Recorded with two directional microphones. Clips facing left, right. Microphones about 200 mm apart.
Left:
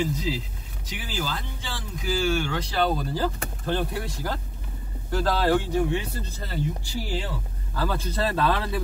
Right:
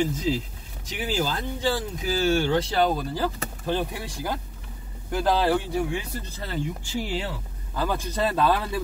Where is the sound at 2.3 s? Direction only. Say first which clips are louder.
Right 5 dB; 35° right (ahead or behind).